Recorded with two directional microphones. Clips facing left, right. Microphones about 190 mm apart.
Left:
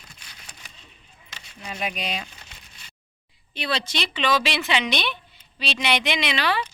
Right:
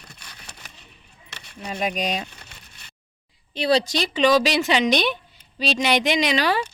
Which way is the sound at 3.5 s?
35° right (ahead or behind).